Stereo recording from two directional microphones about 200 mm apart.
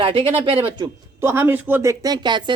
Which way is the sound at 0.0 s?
25° right (ahead or behind).